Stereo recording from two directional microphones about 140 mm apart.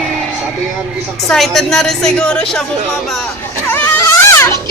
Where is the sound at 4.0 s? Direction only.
20° left (ahead or behind).